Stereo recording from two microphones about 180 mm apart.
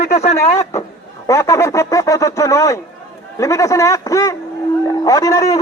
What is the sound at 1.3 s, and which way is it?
A man's voice, 15° left (ahead or behind).